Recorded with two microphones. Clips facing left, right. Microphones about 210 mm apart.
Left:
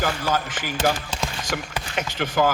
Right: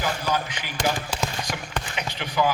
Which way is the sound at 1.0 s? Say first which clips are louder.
Right 1 dB; 45° left (ahead or behind).